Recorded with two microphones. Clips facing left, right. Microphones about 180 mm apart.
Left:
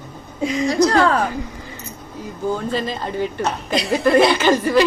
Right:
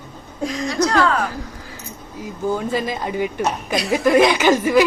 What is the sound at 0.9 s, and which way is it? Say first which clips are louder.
Speech: left 2 dB; 35° left (ahead or behind).